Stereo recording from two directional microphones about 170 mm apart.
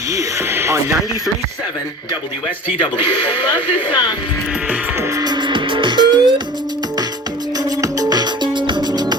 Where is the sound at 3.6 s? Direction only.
30° left (ahead or behind).